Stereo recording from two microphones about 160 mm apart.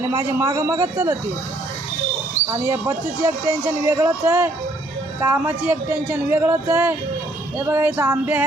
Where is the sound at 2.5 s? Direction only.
20° right (ahead or behind).